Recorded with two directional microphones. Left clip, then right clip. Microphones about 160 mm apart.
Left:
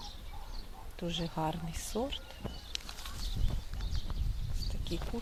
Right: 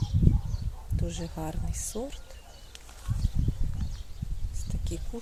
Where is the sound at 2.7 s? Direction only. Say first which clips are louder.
Left 10 dB; 60° left (ahead or behind).